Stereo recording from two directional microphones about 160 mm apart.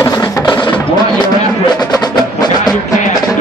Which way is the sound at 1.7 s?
25° left (ahead or behind).